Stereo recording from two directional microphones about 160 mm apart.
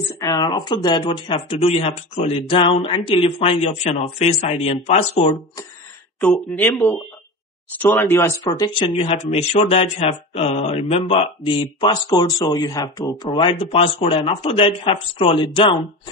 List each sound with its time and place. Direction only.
0.1 s speech: 25° left (ahead or behind); by 5.3 s 40° left (ahead or behind)
6.2 s speech: 5° left (ahead or behind)
8.7 s speech: 35° left (ahead or behind)